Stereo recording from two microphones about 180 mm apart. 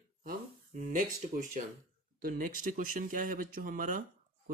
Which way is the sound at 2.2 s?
50° right (ahead or behind).